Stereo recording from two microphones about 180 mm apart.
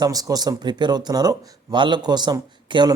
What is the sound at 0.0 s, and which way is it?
Speech, 20° right (ahead or behind).